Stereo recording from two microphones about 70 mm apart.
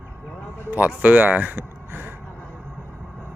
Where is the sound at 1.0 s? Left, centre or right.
Right.